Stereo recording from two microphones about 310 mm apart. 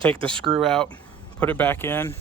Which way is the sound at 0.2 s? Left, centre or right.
Centre.